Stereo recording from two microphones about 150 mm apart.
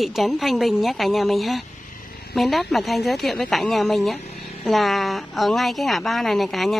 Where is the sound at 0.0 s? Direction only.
Centre (ahead or behind).